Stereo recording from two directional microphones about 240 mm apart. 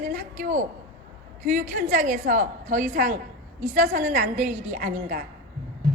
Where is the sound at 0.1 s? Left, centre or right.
Right.